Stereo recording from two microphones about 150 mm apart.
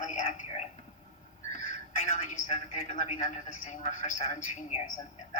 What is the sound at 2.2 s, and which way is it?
A woman's voice, 55° left (ahead or behind).